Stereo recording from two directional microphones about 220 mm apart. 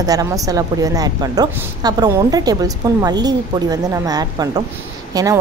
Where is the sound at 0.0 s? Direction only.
15° right (ahead or behind).